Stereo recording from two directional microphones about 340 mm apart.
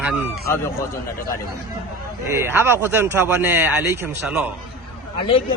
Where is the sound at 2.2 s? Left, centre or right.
Centre.